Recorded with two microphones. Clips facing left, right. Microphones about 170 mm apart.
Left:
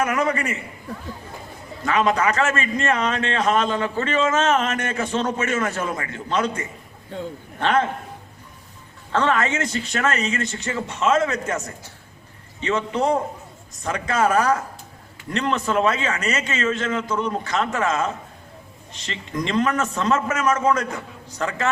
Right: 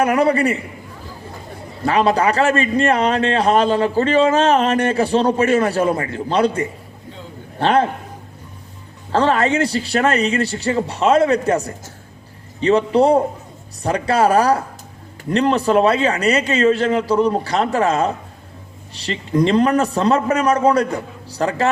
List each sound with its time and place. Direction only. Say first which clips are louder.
0.0 s a man's voice: right 7 dB; 35° right (ahead or behind)
1.8 s a man's voice: right 4 dB; 35° right (ahead or behind)
9.1 s a man's voice: right 5 dB; 35° right (ahead or behind)